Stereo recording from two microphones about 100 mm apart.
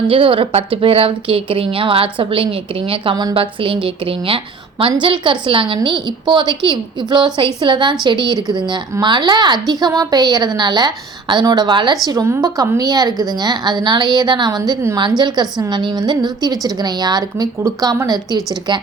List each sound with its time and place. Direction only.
0.1 s a woman's voice: 65° right (ahead or behind); by 11.9 s 50° right (ahead or behind)
12.2 s a woman's voice: 30° right (ahead or behind); by 14.6 s 50° right (ahead or behind)
14.6 s a woman's voice: 35° right (ahead or behind)
14.9 s a woman's voice: 45° right (ahead or behind)